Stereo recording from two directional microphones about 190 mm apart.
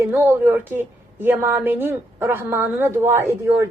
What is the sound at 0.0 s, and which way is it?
A woman's voice, 10° right (ahead or behind).